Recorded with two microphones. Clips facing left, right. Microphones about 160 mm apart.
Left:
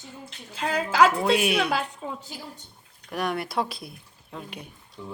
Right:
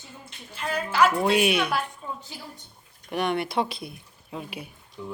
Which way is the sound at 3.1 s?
Centre (ahead or behind).